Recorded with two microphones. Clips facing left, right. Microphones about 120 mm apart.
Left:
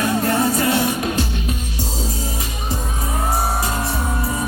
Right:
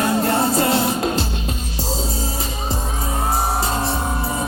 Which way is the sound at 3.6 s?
30° right (ahead or behind).